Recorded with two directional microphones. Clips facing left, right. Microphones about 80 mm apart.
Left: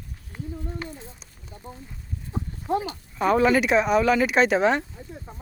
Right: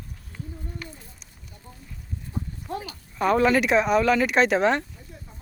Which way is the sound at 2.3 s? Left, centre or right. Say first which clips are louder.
Left 7 dB; left.